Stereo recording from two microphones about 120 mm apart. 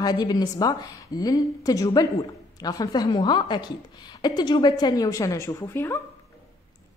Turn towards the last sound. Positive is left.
turn(degrees=20)  # may be behind; listen again after turning